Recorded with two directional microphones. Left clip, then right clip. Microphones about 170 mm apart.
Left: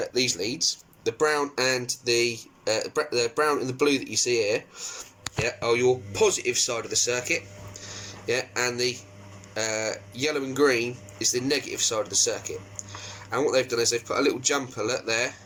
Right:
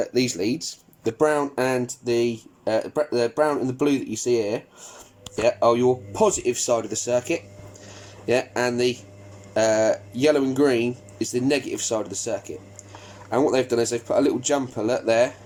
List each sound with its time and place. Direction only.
0.0 s speech: 45° right (ahead or behind)